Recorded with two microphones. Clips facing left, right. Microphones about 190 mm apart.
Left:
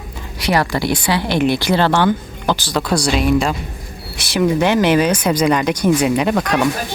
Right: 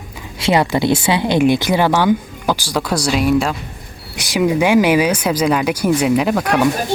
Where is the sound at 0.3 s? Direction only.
20° right (ahead or behind).